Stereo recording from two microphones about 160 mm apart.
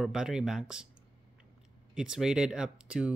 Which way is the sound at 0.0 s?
5° right (ahead or behind).